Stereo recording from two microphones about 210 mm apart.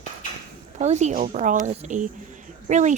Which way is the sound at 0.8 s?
35° right (ahead or behind).